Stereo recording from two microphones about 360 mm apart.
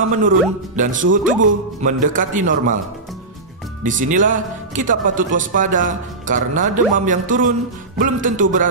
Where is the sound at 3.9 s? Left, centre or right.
Right.